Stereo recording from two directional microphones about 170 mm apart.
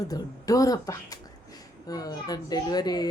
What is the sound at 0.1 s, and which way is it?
Speech, 20° left (ahead or behind).